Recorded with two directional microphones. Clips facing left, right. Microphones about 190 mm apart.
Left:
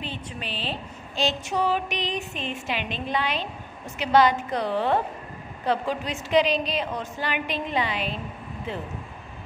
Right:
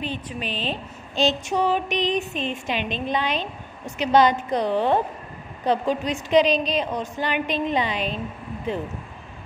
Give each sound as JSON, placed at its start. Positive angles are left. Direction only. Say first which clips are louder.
{"t": 0.0, "sound": "speech", "louder": "right 5 dB", "side_deg": -15}